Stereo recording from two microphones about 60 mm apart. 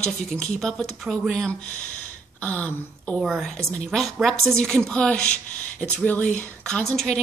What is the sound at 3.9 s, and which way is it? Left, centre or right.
A woman's voice, centre.